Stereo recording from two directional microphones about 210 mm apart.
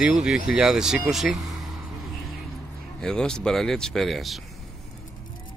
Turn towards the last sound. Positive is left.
turn(degrees=0)  # may be behind; listen again after turning